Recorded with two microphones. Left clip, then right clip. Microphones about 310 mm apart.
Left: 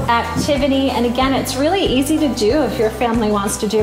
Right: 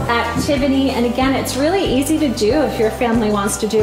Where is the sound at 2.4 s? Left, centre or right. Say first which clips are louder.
Right 1 dB; centre.